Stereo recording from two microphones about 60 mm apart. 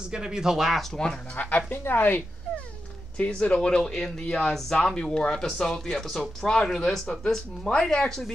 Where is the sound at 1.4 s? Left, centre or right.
Left.